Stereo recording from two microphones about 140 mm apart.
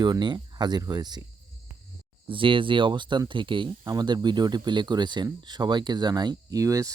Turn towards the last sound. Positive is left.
turn(degrees=-25)  # may be behind; listen again after turning